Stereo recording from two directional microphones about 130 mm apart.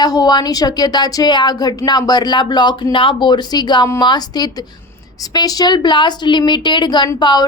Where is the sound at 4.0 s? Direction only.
30° left (ahead or behind).